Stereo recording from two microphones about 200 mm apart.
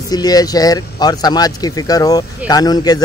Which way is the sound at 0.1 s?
20° left (ahead or behind).